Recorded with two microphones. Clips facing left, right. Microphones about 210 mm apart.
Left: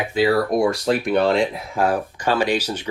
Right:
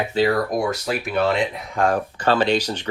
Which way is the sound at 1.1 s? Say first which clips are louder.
Left 1 dB; centre (ahead or behind).